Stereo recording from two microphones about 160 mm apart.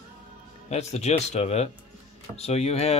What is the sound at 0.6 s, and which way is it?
Speech, 45° left (ahead or behind).